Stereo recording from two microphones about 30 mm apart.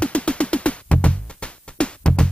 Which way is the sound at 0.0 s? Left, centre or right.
Left.